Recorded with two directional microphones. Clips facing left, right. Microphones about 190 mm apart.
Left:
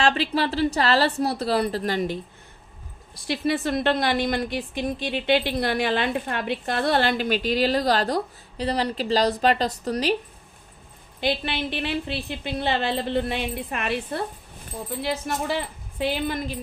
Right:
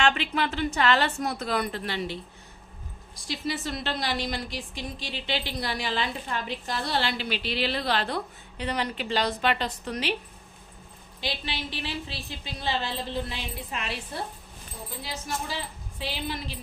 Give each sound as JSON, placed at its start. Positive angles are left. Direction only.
{"t": 0.0, "sound": "a woman's voice", "side_deg": 35}
{"t": 3.2, "sound": "a woman's voice", "side_deg": 55}
{"t": 11.2, "sound": "a woman's voice", "side_deg": 55}